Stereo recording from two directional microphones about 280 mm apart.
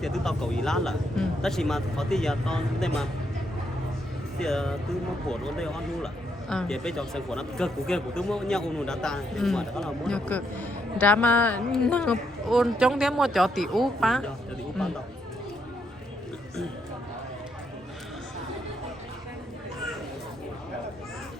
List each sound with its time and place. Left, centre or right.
0.0 s a man's voice: centre
4.4 s a man's voice: centre